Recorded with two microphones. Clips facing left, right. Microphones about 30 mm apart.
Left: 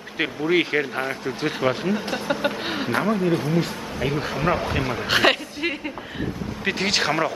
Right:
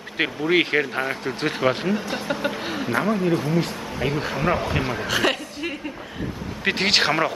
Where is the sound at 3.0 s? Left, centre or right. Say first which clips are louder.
Even; centre.